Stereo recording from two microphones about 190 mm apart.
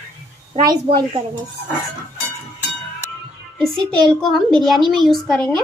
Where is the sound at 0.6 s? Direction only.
25° right (ahead or behind).